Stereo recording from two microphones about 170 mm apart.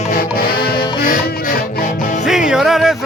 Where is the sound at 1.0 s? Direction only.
55° left (ahead or behind).